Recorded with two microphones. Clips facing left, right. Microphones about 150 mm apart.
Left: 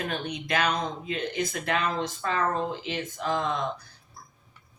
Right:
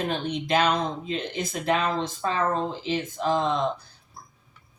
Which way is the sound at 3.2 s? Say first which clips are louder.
Right 4 dB; 25° right (ahead or behind).